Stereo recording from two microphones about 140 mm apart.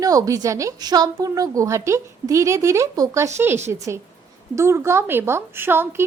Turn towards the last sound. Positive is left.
turn(degrees=-15)  # may be behind; listen again after turning